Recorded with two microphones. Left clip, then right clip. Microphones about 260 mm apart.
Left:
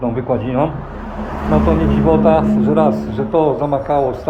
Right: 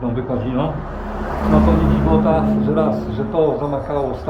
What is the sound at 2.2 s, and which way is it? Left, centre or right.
Speech, centre.